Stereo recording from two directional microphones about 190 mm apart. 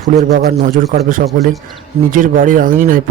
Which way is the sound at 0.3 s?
50° right (ahead or behind).